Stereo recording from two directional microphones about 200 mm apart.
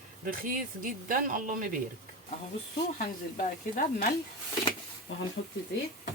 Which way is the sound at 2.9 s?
40° left (ahead or behind).